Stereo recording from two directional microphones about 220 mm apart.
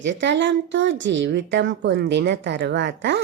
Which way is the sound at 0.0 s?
55° right (ahead or behind).